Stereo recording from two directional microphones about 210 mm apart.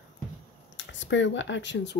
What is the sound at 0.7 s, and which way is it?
Speech, 60° left (ahead or behind).